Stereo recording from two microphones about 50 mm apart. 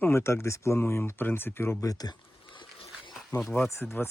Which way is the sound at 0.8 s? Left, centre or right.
Left.